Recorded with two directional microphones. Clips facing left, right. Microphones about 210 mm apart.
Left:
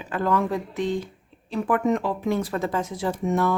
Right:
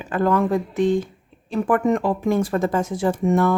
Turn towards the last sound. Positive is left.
turn(degrees=-50)  # may be behind; listen again after turning